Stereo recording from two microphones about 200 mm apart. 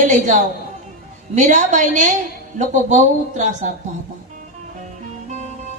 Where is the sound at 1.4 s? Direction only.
40° right (ahead or behind).